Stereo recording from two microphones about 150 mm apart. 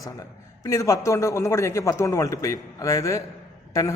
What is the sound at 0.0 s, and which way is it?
A man's voice, 20° left (ahead or behind).